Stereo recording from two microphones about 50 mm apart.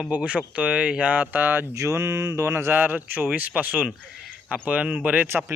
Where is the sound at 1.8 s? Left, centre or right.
Right.